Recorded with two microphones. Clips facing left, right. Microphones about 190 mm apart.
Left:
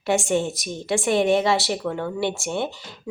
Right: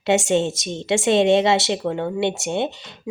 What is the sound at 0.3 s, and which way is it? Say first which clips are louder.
Speech: right 3 dB; 25° right (ahead or behind).